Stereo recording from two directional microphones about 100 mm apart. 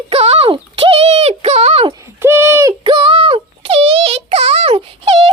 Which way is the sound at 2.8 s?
60° right (ahead or behind).